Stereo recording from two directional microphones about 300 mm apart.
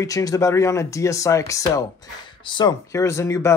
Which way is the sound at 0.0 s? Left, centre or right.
Centre.